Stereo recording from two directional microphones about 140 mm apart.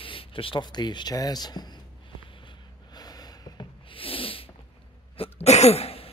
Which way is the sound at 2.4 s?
30° left (ahead or behind).